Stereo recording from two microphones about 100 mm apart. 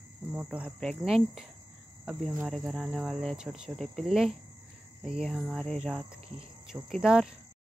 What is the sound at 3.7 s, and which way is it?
Speech, 5° left (ahead or behind).